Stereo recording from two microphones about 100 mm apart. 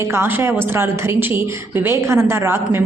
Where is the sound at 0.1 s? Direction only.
25° right (ahead or behind).